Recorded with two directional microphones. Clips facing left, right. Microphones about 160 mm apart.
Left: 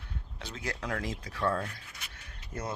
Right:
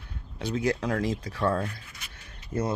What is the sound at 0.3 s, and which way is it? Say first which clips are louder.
Speech: right 12 dB; 10° right (ahead or behind).